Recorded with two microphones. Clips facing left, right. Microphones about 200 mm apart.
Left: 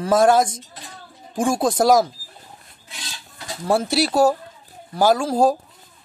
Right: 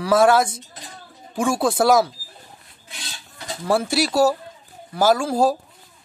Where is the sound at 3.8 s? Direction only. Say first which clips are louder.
Left 1 dB; 45° right (ahead or behind).